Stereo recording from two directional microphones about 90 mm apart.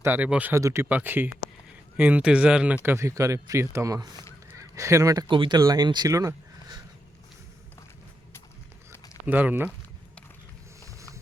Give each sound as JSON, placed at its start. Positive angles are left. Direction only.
{"t": 0.0, "sound": "speech", "side_deg": -25}
{"t": 0.3, "sound": "speech", "side_deg": -15}
{"t": 0.5, "sound": "speech", "side_deg": -30}
{"t": 2.8, "sound": "speech", "side_deg": -30}
{"t": 4.5, "sound": "honk", "side_deg": -35}
{"t": 5.3, "sound": "speech", "side_deg": -65}
{"t": 5.5, "sound": "speech", "side_deg": -45}
{"t": 6.1, "sound": "a sound", "side_deg": -40}
{"t": 9.2, "sound": "speech", "side_deg": -20}